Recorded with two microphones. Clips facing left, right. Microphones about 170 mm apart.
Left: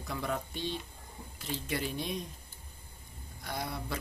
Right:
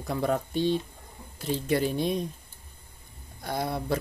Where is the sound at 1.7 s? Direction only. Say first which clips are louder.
Right 10 dB; 40° right (ahead or behind).